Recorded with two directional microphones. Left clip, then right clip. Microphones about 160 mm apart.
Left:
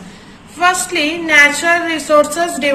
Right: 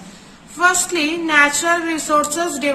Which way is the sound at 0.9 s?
45° right (ahead or behind).